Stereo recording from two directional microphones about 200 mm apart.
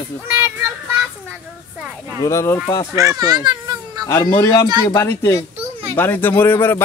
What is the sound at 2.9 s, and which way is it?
A child's voice, 15° right (ahead or behind).